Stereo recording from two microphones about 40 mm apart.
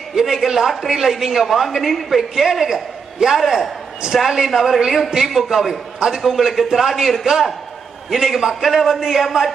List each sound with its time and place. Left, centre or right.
0.2 s a man's voice: centre
6.0 s a man's voice: right
6.2 s a man's voice: centre
8.1 s a man's voice: centre